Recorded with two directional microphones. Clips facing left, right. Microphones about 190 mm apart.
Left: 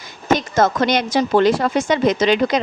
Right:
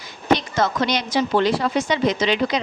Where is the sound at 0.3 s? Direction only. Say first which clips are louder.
Left 5 dB; 45° left (ahead or behind).